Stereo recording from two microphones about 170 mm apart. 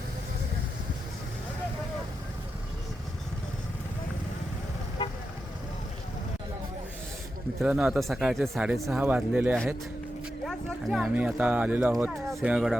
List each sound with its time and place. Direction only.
5.0 s vehicle: 30° left (ahead or behind)
7.6 s speech: 5° right (ahead or behind)
10.4 s speech: centre (ahead or behind)